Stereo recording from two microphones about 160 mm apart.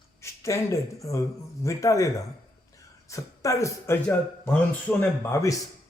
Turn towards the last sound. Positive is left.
turn(degrees=20)  # may be behind; listen again after turning